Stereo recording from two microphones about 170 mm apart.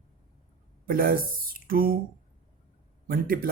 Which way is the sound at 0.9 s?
60° right (ahead or behind).